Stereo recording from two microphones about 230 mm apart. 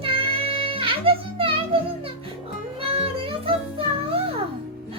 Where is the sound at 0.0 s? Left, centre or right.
Right.